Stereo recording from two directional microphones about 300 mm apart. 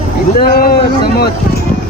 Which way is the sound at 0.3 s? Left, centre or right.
Left.